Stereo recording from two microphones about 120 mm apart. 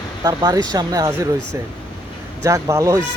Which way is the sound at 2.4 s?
25° right (ahead or behind).